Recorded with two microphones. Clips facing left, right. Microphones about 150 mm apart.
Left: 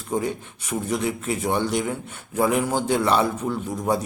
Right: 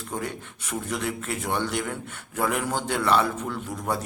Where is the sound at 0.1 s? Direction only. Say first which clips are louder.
Left 8 dB; 15° left (ahead or behind).